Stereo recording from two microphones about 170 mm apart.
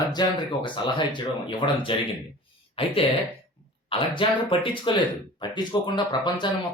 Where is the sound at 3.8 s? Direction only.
30° left (ahead or behind).